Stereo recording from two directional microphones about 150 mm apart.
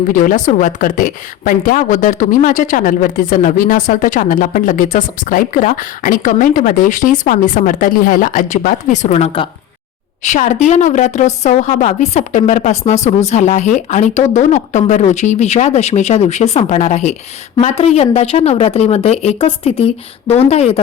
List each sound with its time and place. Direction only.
0.1 s a woman's voice: 60° left (ahead or behind); by 9.5 s 40° left (ahead or behind)
10.2 s a woman's voice: 55° left (ahead or behind)